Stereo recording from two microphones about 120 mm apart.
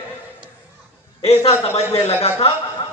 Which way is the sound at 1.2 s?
60° left (ahead or behind).